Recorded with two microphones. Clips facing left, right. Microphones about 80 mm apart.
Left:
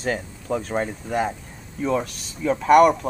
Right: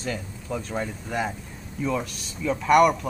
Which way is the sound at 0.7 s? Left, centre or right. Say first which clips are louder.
Left 3 dB; left.